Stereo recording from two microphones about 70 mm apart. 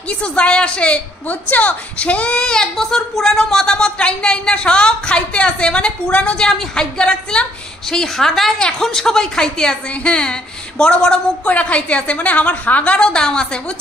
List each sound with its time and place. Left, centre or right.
0.1 s a woman's voice: centre